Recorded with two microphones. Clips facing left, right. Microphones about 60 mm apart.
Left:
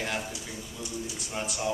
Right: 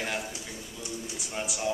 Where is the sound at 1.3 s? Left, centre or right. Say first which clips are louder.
Even; centre.